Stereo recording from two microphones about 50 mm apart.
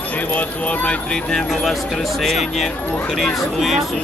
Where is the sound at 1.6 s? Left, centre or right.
Centre.